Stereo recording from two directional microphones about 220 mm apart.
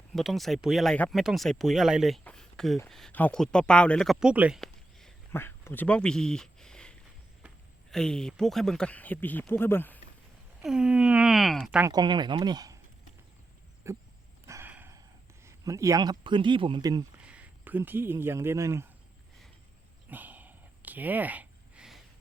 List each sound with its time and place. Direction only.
0.1 s speech: centre (ahead or behind)
10.6 s speech: 5° right (ahead or behind)
11.9 s speech: 20° right (ahead or behind)
13.8 s a man's voice: 15° right (ahead or behind)
14.4 s a sound: 10° right (ahead or behind)
15.4 s a man's voice: 15° right (ahead or behind)
17.2 s speech: 5° right (ahead or behind)
20.1 s a sound: 5° right (ahead or behind)